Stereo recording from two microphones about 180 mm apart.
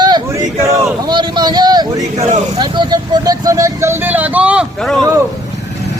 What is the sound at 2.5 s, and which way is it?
Speech, 25° right (ahead or behind).